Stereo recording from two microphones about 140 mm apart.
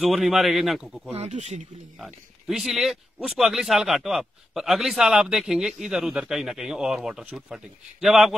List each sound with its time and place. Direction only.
0.0 s speech: centre (ahead or behind)
1.1 s speech: 50° right (ahead or behind)
2.4 s speech: centre (ahead or behind)